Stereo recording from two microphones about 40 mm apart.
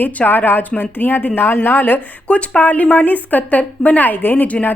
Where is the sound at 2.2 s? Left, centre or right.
Left.